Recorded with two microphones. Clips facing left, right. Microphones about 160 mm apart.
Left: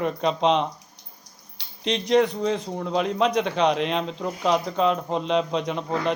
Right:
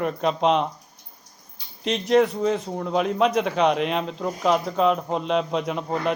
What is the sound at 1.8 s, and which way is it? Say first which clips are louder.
A man's voice: right 1 dB; 5° right (ahead or behind).